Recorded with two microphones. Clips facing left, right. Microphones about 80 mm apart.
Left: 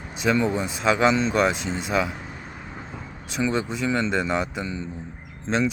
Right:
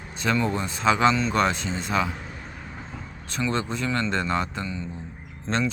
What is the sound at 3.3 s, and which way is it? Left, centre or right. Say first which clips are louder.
Speech: left 2 dB; centre.